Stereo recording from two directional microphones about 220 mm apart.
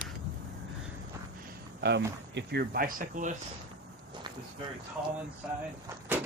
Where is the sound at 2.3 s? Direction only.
45° right (ahead or behind).